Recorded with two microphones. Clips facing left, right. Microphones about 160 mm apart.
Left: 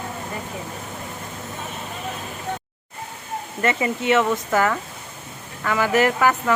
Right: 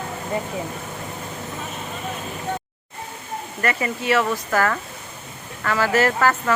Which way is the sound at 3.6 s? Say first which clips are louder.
Left 2 dB; 20° left (ahead or behind).